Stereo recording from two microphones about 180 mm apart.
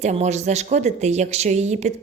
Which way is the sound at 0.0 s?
40° right (ahead or behind).